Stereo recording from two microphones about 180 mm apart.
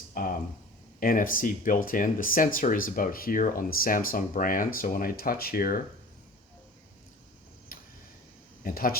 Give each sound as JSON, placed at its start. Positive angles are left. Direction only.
{"t": 0.1, "sound": "a sound", "side_deg": 50}
{"t": 0.9, "sound": "speech", "side_deg": 50}
{"t": 7.7, "sound": "tick-tock", "side_deg": 55}
{"t": 8.6, "sound": "speech", "side_deg": 55}